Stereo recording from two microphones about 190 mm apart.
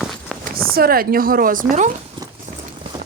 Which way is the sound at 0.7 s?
50° right (ahead or behind).